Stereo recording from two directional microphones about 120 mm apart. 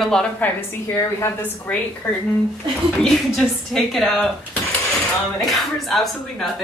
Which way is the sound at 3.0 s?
Centre (ahead or behind).